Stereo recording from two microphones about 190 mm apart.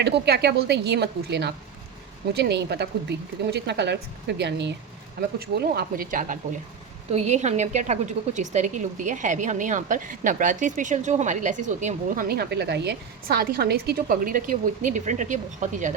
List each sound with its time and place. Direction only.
0.0 s a woman's voice: 60° right (ahead or behind); by 12.2 s 40° right (ahead or behind)
12.3 s a woman's voice: 60° right (ahead or behind); by 15.9 s 40° right (ahead or behind)